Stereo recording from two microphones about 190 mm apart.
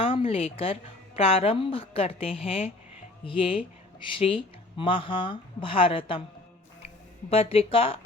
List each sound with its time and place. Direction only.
0.0 s a woman's voice: 30° left (ahead or behind)
7.3 s a woman's voice: 30° left (ahead or behind)